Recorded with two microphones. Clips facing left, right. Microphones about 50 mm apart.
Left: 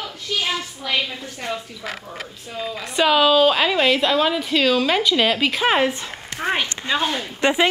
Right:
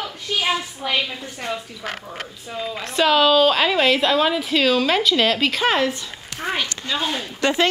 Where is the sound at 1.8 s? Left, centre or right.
Right.